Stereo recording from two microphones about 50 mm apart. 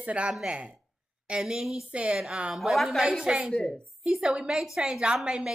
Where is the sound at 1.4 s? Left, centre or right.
Centre.